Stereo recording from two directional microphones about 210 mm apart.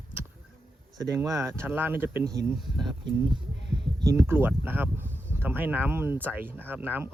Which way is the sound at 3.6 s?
55° right (ahead or behind).